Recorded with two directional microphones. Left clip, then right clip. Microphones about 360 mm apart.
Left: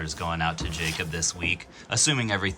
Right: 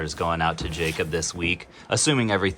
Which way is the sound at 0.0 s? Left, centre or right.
Centre.